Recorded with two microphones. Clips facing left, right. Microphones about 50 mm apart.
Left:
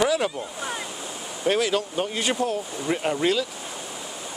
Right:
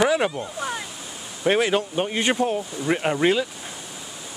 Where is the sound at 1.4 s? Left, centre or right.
Right.